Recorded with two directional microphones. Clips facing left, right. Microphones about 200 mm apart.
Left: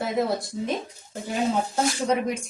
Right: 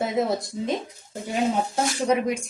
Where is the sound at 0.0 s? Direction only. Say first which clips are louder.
Right 1 dB; 20° right (ahead or behind).